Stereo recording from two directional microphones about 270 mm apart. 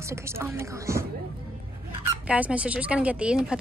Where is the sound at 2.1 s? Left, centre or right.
Centre.